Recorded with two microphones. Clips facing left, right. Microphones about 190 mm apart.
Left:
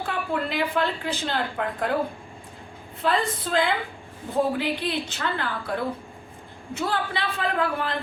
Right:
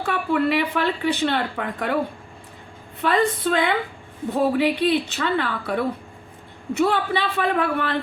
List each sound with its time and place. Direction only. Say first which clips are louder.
0.0 s speech: right 6 dB; 70° right (ahead or behind)
3.0 s speech: right 4 dB; 70° right (ahead or behind)